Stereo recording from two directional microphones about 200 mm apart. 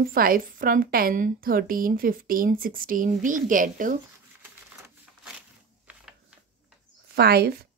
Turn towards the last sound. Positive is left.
turn(degrees=-50)  # may be behind; listen again after turning